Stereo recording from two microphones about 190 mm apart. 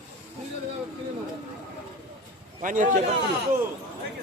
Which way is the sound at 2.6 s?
45° right (ahead or behind).